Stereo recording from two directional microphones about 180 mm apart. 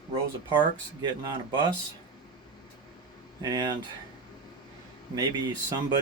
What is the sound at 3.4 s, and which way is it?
Speech, 20° right (ahead or behind).